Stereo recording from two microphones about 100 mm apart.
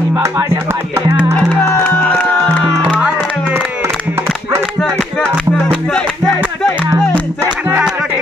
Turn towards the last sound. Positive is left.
turn(degrees=5)  # may be behind; listen again after turning